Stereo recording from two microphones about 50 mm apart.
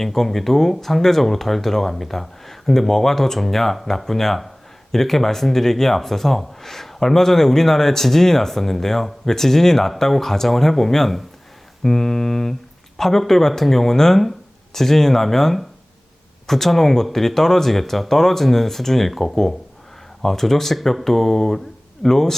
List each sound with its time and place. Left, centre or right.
0.0 s speech: centre